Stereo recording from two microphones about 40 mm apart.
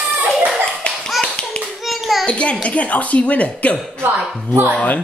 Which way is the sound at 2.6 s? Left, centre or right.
Left.